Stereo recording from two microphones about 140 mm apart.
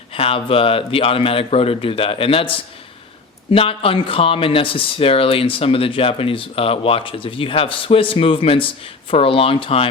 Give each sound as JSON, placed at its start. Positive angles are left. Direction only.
{"t": 0.1, "sound": "speech", "side_deg": 40}